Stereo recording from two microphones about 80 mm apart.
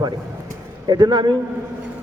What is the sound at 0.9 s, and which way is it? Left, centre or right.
Speech, right.